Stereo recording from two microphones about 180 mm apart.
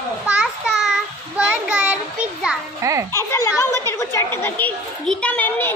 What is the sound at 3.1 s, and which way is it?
A woman's voice, 15° left (ahead or behind).